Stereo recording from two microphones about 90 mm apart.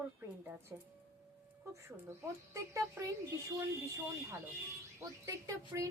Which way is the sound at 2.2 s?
35° right (ahead or behind).